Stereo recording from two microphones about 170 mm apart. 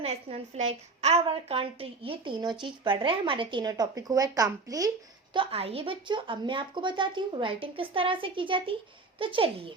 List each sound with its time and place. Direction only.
0.0 s a woman's voice: 40° right (ahead or behind); by 4.9 s 20° right (ahead or behind)
5.3 s a woman's voice: 30° right (ahead or behind)